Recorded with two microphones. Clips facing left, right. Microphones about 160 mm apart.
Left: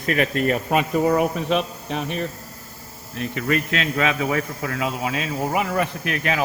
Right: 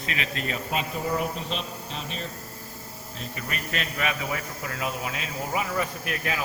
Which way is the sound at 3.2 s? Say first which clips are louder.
Left 12 dB; 75° left (ahead or behind).